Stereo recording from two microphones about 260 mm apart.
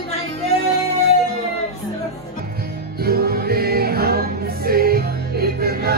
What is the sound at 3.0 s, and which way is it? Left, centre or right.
Music, right.